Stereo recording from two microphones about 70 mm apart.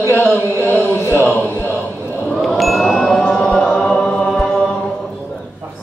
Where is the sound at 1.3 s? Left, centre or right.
Left.